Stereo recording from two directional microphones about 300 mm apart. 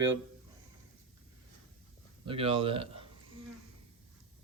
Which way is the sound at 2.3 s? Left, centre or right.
Centre.